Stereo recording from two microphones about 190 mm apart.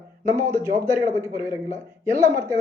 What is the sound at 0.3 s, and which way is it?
Speech, 15° right (ahead or behind).